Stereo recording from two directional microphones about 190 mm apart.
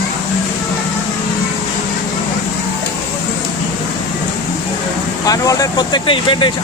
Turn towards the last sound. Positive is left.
turn(degrees=25)  # may be behind; listen again after turning